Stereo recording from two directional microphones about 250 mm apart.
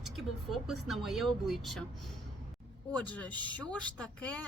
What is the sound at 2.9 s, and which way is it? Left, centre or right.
Speech, centre.